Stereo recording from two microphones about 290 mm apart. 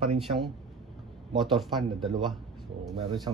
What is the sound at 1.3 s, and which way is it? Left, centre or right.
Speech, centre.